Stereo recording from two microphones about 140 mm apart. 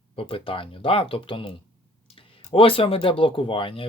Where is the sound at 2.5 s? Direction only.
40° left (ahead or behind).